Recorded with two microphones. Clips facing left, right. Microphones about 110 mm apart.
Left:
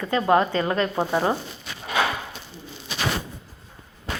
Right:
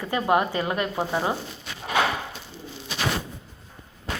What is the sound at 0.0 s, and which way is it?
A woman's voice, 15° right (ahead or behind).